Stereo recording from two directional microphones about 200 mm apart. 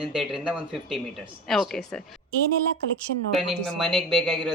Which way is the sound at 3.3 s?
Centre (ahead or behind).